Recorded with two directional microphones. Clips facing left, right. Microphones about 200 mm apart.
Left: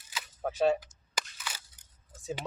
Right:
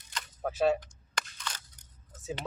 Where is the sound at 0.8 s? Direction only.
5° left (ahead or behind).